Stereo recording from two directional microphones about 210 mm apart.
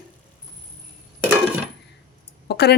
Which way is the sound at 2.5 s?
50° left (ahead or behind).